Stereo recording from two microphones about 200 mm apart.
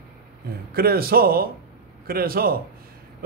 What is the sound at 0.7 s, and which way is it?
Speech, 50° right (ahead or behind).